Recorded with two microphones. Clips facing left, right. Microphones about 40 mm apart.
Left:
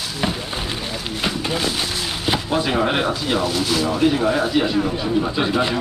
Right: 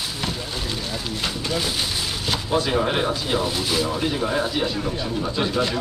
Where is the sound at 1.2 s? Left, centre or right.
Centre.